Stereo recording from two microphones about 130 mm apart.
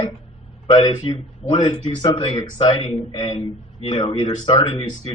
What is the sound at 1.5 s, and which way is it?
Speech, 50° left (ahead or behind).